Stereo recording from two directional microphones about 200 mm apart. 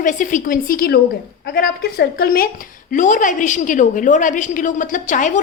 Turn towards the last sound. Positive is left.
turn(degrees=40)  # may be behind; listen again after turning